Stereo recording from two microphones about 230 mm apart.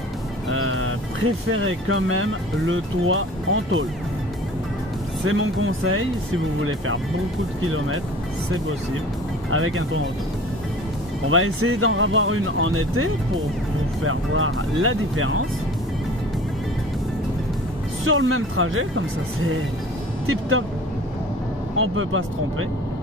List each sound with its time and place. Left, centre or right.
0.5 s speech: right
5.2 s speech: right
9.5 s speech: right
11.2 s speech: right
18.0 s speech: right
21.7 s speech: right